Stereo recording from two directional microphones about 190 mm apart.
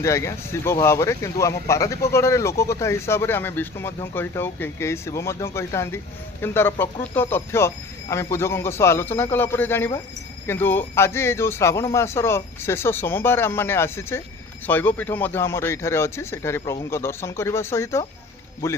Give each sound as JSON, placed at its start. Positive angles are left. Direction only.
{"t": 0.0, "sound": "speech", "side_deg": 15}